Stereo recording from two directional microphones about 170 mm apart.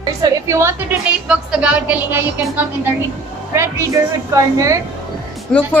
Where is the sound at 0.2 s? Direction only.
20° right (ahead or behind).